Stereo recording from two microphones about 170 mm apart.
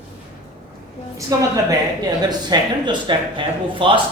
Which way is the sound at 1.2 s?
20° right (ahead or behind).